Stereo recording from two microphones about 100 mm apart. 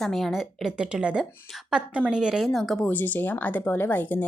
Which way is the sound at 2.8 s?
20° left (ahead or behind).